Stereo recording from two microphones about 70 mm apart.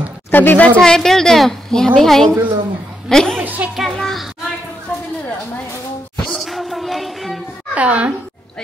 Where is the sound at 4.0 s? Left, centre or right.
Centre.